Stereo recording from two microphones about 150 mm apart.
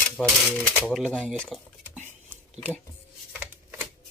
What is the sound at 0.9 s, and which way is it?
Speech, 5° left (ahead or behind).